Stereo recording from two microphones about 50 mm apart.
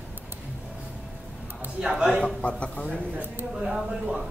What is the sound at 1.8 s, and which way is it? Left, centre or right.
Speech, centre.